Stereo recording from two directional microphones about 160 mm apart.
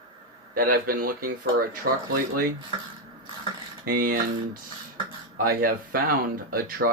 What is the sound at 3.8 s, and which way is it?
Speech, 60° right (ahead or behind).